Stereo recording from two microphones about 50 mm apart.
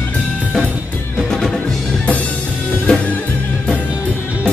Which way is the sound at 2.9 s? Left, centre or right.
Centre.